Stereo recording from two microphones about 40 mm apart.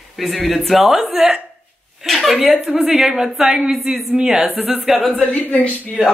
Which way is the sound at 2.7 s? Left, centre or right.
Right.